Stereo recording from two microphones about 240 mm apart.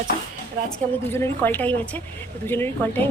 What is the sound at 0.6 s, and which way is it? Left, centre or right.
Speech, right.